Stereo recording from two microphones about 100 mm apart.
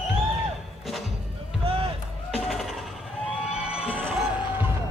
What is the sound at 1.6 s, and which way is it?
Run, 70° right (ahead or behind).